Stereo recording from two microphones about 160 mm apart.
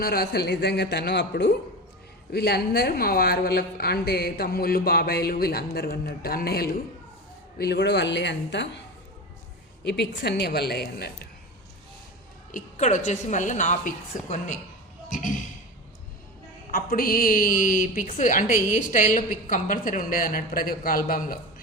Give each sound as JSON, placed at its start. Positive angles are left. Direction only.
{"t": 0.0, "sound": "speech", "side_deg": 70}
{"t": 7.6, "sound": "speech", "side_deg": 90}
{"t": 9.8, "sound": "speech", "side_deg": 90}
{"t": 12.5, "sound": "a woman's voice", "side_deg": 50}
{"t": 16.7, "sound": "a woman's voice", "side_deg": 65}